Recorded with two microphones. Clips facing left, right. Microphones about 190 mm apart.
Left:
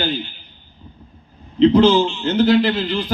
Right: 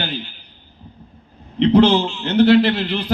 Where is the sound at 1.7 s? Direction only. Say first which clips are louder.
Even; 65° right (ahead or behind).